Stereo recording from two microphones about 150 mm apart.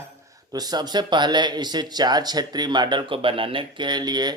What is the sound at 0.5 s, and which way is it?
Speech, 25° right (ahead or behind).